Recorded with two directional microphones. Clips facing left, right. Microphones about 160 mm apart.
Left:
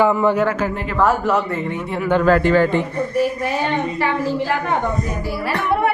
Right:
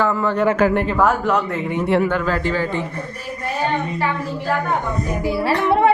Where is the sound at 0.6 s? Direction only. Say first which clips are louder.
Right 6 dB; 70° right (ahead or behind).